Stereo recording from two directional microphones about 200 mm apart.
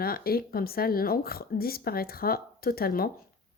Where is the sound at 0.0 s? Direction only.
50° left (ahead or behind).